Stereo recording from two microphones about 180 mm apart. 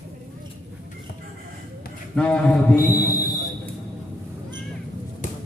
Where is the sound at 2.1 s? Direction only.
5° left (ahead or behind).